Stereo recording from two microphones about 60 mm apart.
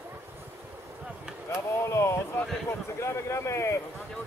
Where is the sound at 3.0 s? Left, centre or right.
Left.